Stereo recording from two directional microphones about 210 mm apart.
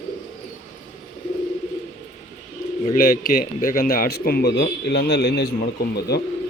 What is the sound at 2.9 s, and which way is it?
A man's voice, 45° left (ahead or behind).